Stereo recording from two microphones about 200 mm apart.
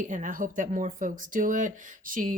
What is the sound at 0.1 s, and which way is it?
A woman's voice, 40° right (ahead or behind).